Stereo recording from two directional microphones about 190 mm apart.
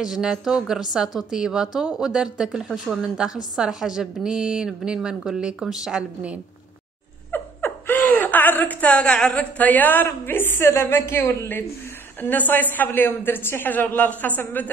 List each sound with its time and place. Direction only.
0.0 s a woman's voice: 5° right (ahead or behind)
7.2 s a woman's voice: 10° left (ahead or behind)